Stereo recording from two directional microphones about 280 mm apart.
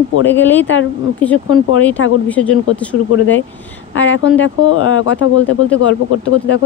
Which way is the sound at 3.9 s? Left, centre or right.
Left.